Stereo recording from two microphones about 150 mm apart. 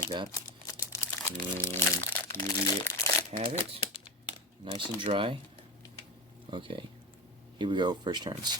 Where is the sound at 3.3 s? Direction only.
45° right (ahead or behind).